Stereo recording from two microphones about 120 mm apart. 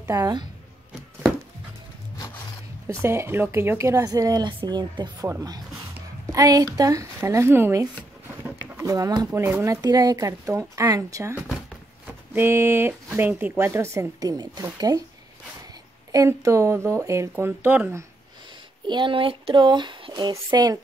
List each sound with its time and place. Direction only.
0.0 s speech: 25° right (ahead or behind)
2.9 s speech: 20° right (ahead or behind); by 5.3 s 40° right (ahead or behind)
6.3 s speech: 30° right (ahead or behind)
8.9 s speech: 30° right (ahead or behind)
12.4 s speech: 20° right (ahead or behind)
16.1 s speech: 25° right (ahead or behind)
18.9 s speech: 40° right (ahead or behind)